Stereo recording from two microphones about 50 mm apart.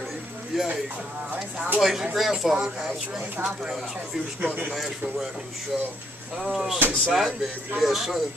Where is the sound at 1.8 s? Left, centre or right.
Centre.